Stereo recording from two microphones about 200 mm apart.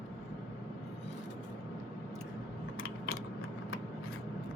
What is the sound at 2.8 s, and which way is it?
Typing, 90° left.